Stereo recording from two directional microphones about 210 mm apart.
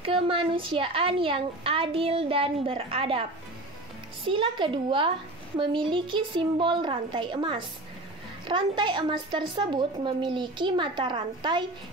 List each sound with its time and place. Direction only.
0.0 s a woman's voice: 25° right (ahead or behind)